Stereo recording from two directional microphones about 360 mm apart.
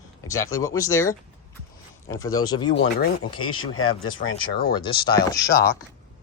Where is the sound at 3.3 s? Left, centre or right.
Left.